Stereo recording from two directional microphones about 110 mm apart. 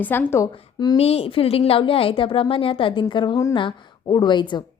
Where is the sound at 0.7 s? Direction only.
40° left (ahead or behind).